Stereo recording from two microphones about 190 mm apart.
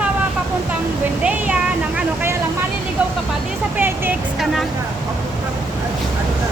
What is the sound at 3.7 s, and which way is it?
Speech, 10° right (ahead or behind).